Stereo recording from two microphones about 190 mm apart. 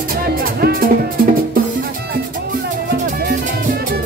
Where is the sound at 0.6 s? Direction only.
50° right (ahead or behind).